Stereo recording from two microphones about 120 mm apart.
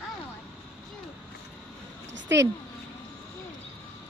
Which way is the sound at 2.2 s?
25° right (ahead or behind).